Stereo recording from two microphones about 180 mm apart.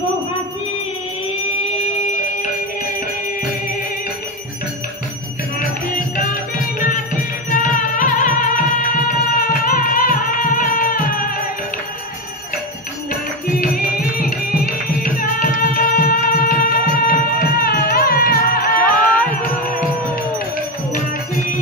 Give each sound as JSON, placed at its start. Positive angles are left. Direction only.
{"t": 1.7, "sound": "a sound", "side_deg": 40}
{"t": 7.5, "sound": "music", "side_deg": 45}
{"t": 13.1, "sound": "music", "side_deg": 55}